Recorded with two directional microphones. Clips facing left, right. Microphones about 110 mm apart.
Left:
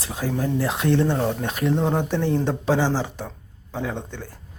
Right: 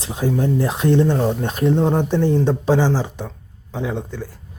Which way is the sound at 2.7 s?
15° right (ahead or behind).